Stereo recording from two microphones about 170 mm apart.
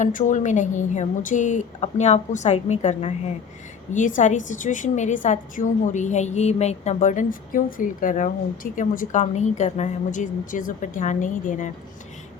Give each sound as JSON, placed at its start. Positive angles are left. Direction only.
{"t": 0.0, "sound": "a woman's voice", "side_deg": 50}